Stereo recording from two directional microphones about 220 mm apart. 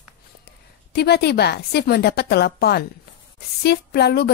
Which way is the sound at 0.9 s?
45° left (ahead or behind).